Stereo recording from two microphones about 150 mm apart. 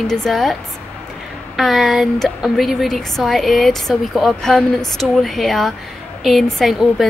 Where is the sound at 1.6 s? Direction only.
Centre (ahead or behind).